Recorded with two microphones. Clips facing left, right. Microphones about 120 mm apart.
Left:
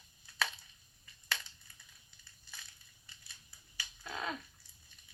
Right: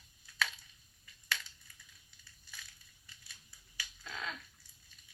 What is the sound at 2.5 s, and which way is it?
Crushing, 25° left (ahead or behind).